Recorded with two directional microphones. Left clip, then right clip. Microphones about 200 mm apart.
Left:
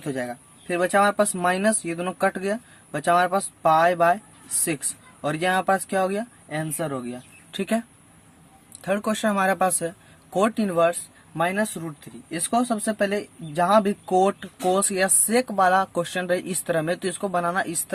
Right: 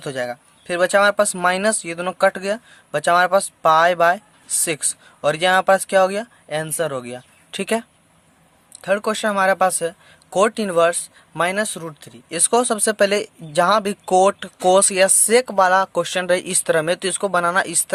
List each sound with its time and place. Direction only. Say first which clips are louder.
0.0 s speech: right 4 dB; 35° right (ahead or behind)